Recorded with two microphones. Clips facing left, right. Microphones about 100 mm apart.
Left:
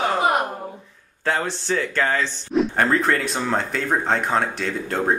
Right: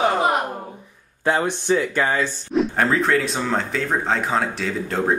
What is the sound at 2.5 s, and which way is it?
Speech, centre (ahead or behind).